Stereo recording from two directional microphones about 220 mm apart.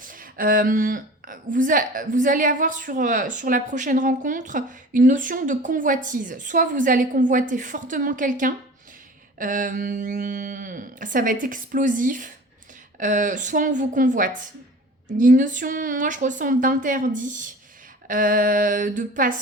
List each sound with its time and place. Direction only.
0.0 s a woman's voice: 40° right (ahead or behind)